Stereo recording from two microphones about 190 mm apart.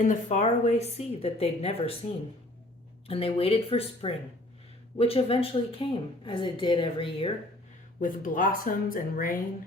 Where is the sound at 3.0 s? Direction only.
30° left (ahead or behind).